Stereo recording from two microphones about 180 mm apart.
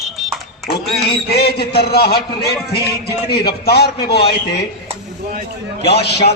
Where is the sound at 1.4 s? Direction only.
60° left (ahead or behind).